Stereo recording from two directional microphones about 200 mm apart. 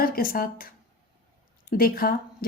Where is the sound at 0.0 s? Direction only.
45° left (ahead or behind).